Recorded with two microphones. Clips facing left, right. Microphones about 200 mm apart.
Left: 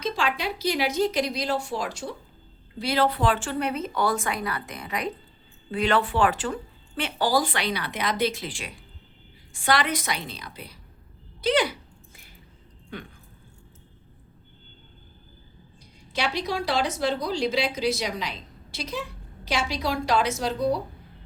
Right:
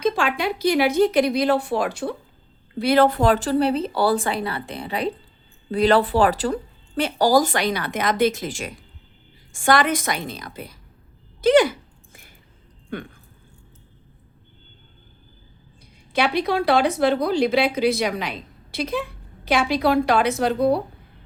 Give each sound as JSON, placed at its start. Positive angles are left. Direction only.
{"t": 0.0, "sound": "a woman's voice", "side_deg": -55}
{"t": 11.3, "sound": "a sound", "side_deg": -45}
{"t": 12.9, "sound": "speech", "side_deg": -55}
{"t": 16.1, "sound": "speech", "side_deg": -55}